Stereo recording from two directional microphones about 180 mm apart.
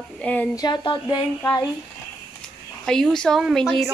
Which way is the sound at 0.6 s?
20° left (ahead or behind).